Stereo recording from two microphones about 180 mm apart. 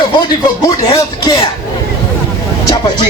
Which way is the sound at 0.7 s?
20° left (ahead or behind).